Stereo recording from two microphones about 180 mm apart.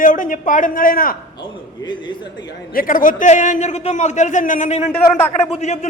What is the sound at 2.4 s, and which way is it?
A man's voice, 55° left (ahead or behind).